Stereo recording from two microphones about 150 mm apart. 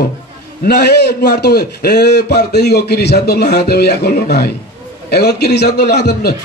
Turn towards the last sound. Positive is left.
turn(degrees=90)